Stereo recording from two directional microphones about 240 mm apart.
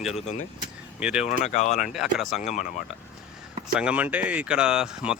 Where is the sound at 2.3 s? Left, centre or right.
Left.